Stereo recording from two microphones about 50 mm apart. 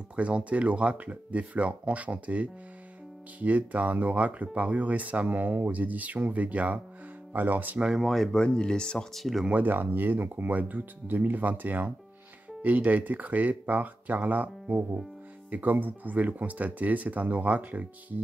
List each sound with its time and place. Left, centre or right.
0.1 s speech: right
8.0 s speech: centre
8.3 s speech: centre
9.1 s speech: centre
9.5 s speech: right